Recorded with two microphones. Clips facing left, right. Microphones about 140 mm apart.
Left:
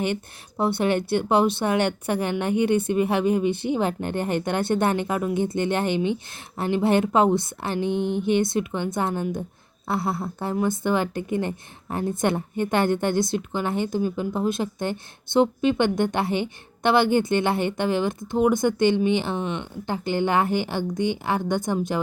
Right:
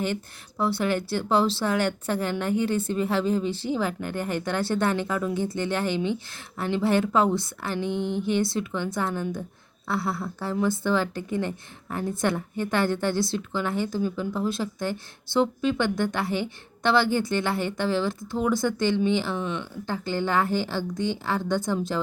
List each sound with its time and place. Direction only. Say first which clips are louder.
0.0 s a woman's voice: left 2 dB; 20° left (ahead or behind)